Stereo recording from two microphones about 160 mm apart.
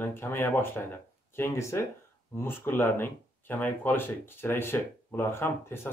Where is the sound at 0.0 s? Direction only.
15° left (ahead or behind).